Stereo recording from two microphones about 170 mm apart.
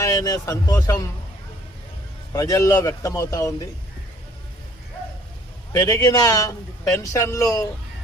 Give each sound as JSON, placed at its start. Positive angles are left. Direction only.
{"t": 0.0, "sound": "a man's voice", "side_deg": 20}
{"t": 2.3, "sound": "a man's voice", "side_deg": 20}
{"t": 5.7, "sound": "a man's voice", "side_deg": 20}